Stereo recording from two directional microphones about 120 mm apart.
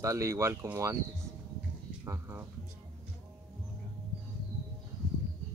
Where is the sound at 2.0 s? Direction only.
20° right (ahead or behind).